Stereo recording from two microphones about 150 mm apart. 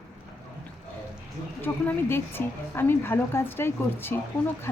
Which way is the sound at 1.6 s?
15° left (ahead or behind).